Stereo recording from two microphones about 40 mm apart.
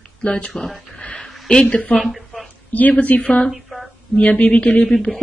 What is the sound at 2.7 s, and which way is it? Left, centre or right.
Speech, left.